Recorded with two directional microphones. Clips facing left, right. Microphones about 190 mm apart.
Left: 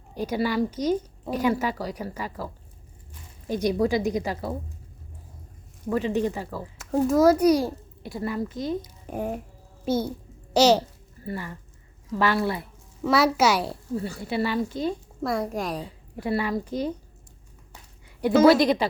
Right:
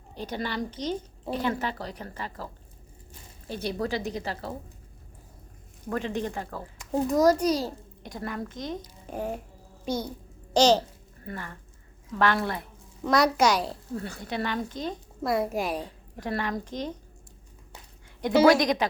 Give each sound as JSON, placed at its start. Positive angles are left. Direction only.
{"t": 0.1, "sound": "a child's voice", "side_deg": 10}
{"t": 5.9, "sound": "a child's voice", "side_deg": 5}